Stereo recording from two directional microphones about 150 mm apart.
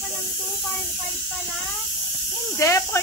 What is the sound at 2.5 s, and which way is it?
Speech, 20° left (ahead or behind).